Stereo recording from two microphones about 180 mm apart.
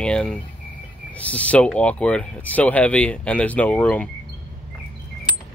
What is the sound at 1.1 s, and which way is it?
Speech, 5° left (ahead or behind).